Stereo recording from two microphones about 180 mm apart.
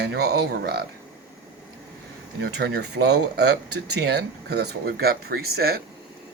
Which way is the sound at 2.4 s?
65° right (ahead or behind).